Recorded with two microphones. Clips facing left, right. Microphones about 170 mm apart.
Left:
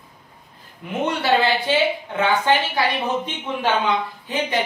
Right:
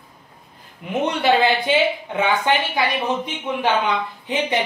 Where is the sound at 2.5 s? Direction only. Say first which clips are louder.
Even; 15° right (ahead or behind).